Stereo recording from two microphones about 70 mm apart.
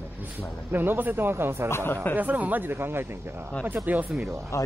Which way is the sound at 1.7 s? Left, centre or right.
Left.